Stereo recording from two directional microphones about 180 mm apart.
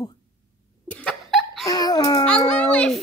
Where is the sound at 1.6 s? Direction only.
20° left (ahead or behind).